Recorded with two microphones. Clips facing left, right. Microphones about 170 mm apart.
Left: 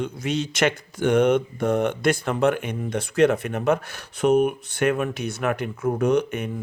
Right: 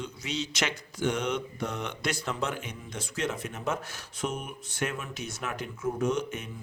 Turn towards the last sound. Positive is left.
turn(degrees=60)  # may be behind; listen again after turning